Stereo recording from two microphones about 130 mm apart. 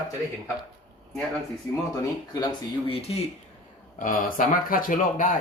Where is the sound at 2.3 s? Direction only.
35° left (ahead or behind).